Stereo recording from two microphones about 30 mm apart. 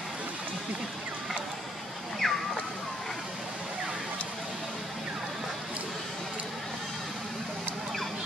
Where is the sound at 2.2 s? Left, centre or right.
Centre.